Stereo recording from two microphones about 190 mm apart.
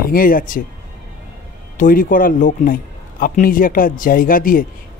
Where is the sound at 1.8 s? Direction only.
45° left (ahead or behind).